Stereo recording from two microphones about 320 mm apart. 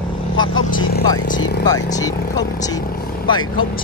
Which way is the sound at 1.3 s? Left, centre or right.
Centre.